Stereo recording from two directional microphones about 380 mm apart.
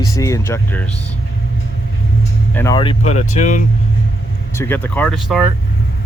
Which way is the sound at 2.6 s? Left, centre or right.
Centre.